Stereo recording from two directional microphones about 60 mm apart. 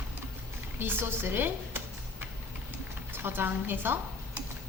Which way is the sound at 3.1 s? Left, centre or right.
Right.